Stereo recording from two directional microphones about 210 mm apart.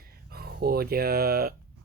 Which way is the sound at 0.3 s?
50° right (ahead or behind).